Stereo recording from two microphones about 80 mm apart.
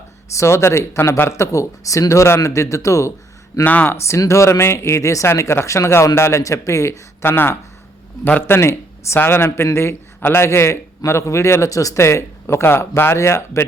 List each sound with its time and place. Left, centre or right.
0.3 s a man's voice: left
3.6 s speech: left
3.9 s a man's voice: left